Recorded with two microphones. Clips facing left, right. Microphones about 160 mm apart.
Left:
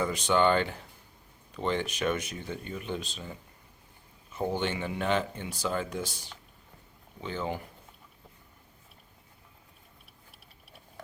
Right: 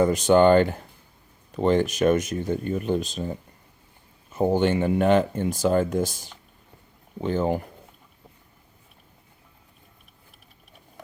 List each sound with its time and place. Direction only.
0.0 s speech: 45° right (ahead or behind)
4.5 s speech: 45° right (ahead or behind)